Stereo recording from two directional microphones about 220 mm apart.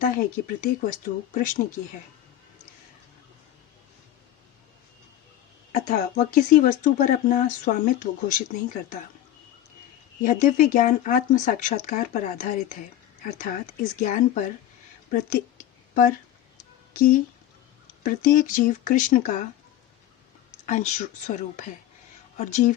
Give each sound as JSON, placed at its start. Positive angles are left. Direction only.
{"t": 0.0, "sound": "speech", "side_deg": 35}
{"t": 5.7, "sound": "speech", "side_deg": 40}
{"t": 10.2, "sound": "speech", "side_deg": 35}
{"t": 14.0, "sound": "speech", "side_deg": 35}
{"t": 15.1, "sound": "a sound", "side_deg": 35}
{"t": 16.9, "sound": "speech", "side_deg": 40}
{"t": 20.7, "sound": "speech", "side_deg": 35}